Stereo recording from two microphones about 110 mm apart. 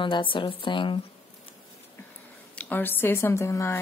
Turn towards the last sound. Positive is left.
turn(degrees=25)  # may be behind; listen again after turning